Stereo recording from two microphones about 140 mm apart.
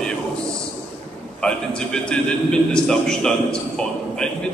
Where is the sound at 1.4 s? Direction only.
5° left (ahead or behind).